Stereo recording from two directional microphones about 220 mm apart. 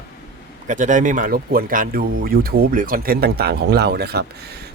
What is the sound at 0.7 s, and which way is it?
Speech, 35° right (ahead or behind).